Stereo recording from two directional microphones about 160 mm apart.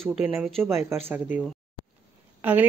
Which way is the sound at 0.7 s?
15° right (ahead or behind).